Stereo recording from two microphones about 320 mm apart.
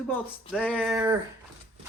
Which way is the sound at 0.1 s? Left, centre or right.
Centre.